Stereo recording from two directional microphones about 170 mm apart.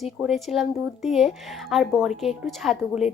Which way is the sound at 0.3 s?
Centre (ahead or behind).